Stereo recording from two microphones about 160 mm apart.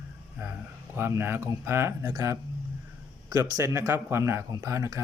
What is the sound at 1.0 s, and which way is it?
Speech, 15° right (ahead or behind).